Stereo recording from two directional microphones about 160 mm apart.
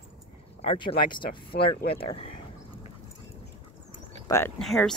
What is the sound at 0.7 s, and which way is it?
Speech, 30° left (ahead or behind).